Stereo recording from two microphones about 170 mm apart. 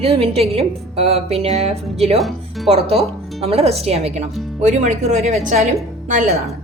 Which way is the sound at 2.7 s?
35° right (ahead or behind).